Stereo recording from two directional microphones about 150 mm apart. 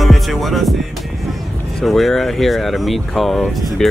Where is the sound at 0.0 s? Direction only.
Centre (ahead or behind).